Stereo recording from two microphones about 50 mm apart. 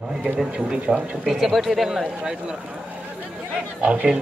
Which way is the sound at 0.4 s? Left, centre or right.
Centre.